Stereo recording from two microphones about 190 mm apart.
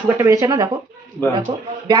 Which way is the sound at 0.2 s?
15° right (ahead or behind).